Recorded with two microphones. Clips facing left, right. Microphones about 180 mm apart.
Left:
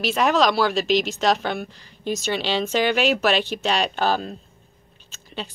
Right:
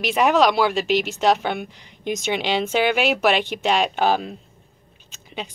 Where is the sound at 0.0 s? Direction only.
10° right (ahead or behind).